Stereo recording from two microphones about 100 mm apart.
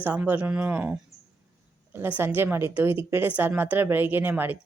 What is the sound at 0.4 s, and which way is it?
Speech, 15° right (ahead or behind).